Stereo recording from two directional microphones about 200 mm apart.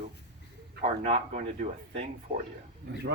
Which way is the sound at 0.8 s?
30° right (ahead or behind).